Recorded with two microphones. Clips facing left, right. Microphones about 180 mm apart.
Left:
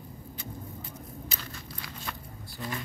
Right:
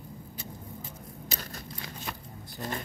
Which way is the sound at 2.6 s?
45° right (ahead or behind).